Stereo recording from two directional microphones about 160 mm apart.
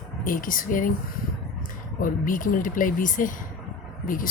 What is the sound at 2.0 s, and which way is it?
Speech, 55° left (ahead or behind).